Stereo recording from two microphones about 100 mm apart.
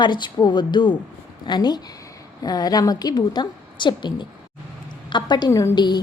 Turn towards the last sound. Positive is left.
turn(degrees=45)  # may be behind; listen again after turning